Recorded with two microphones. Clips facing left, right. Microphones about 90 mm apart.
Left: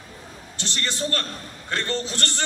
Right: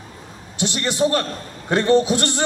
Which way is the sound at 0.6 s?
15° right (ahead or behind).